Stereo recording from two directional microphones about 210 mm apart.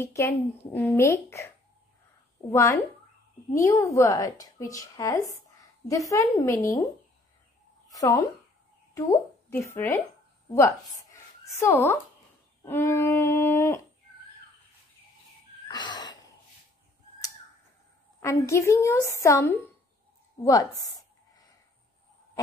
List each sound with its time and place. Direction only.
0.0 s speech: 10° left (ahead or behind)
2.5 s speech: 10° left (ahead or behind)
7.9 s a woman's voice: 15° left (ahead or behind)
15.7 s a sound: 20° left (ahead or behind)
18.2 s speech: 15° left (ahead or behind)
20.4 s a sound: 15° left (ahead or behind)